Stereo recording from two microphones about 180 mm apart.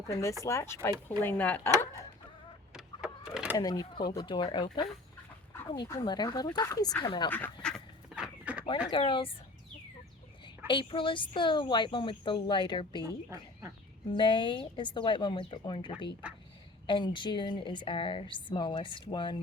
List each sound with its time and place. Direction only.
0.1 s speech: 15° left (ahead or behind)
2.7 s vehicle: 5° right (ahead or behind)
3.6 s a woman's voice: 20° left (ahead or behind)
7.3 s speech: 10° left (ahead or behind)
8.1 s a sound: 5° right (ahead or behind)
8.9 s a woman's voice: 30° left (ahead or behind)
10.7 s a woman's voice: 30° left (ahead or behind)
13.0 s speech: 15° right (ahead or behind)
14.1 s a woman's voice: 25° left (ahead or behind)
16.2 s a sound: 5° right (ahead or behind)
16.8 s a woman's voice: 25° left (ahead or behind)